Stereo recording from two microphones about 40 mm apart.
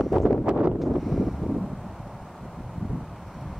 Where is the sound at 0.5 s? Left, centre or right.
Right.